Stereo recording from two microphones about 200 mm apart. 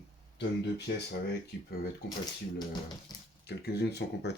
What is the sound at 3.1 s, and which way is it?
Speech, 20° left (ahead or behind).